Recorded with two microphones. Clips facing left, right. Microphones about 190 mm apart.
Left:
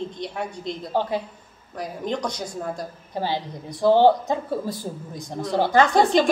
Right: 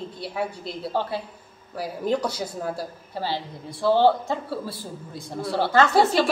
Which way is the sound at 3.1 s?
15° left (ahead or behind).